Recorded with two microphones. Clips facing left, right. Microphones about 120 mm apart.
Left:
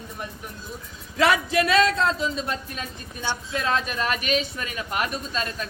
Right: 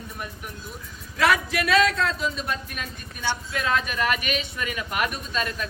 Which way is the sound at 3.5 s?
30° left (ahead or behind).